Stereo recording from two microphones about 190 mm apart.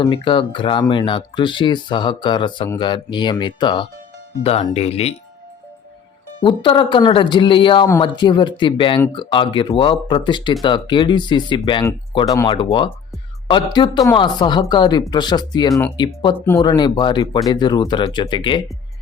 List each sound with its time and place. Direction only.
0.0 s speech: 25° left (ahead or behind)
6.4 s speech: 25° left (ahead or behind)